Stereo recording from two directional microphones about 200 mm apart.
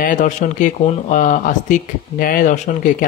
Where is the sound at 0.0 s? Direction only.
40° left (ahead or behind).